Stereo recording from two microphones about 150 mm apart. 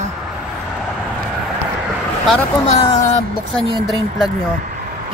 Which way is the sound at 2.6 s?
45° left (ahead or behind).